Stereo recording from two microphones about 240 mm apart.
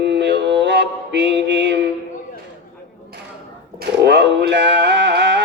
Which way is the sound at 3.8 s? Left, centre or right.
Right.